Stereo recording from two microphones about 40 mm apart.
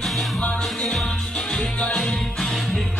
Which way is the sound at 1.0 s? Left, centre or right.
Left.